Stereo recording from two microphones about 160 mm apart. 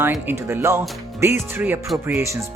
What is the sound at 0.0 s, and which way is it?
Speech, 15° right (ahead or behind).